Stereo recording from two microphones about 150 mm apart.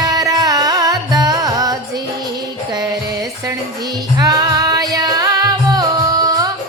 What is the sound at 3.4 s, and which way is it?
Music, 25° right (ahead or behind).